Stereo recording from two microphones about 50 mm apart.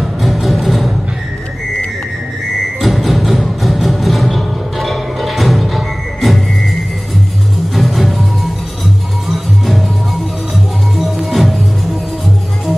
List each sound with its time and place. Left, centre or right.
0.0 s music: centre
2.8 s music: centre
7.7 s music: centre
10.5 s music: centre